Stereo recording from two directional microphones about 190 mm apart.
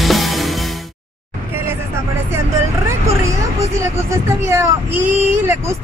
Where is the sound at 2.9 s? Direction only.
15° right (ahead or behind).